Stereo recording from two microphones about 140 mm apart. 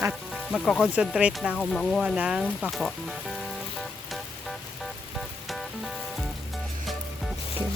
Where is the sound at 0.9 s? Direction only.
10° right (ahead or behind).